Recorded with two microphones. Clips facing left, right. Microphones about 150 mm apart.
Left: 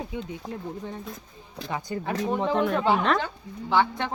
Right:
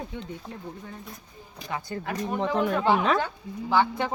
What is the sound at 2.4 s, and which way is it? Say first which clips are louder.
Speech: right 1 dB; centre (ahead or behind).